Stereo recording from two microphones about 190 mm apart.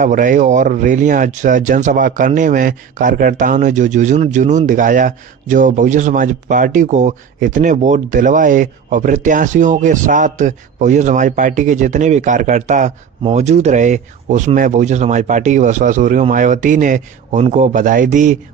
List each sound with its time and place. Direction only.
0.0 s speech: 45° right (ahead or behind)